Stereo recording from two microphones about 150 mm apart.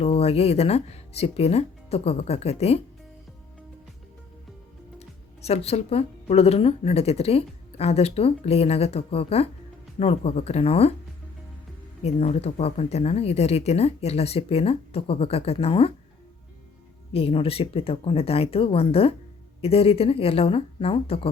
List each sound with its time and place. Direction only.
0.0 s speech: 40° left (ahead or behind)
4.9 s speech: 45° left (ahead or behind)
12.0 s speech: 45° left (ahead or behind)
17.1 s speech: 40° left (ahead or behind)